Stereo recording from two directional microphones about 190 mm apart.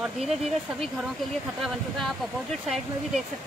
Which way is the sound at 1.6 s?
Centre (ahead or behind).